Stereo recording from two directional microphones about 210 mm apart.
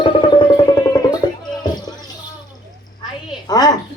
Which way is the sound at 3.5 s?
20° left (ahead or behind).